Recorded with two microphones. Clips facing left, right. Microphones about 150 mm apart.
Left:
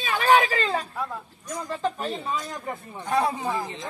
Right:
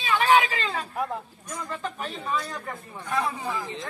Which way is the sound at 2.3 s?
20° left (ahead or behind).